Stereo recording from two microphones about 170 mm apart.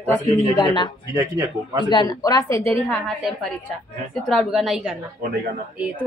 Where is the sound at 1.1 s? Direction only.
15° right (ahead or behind).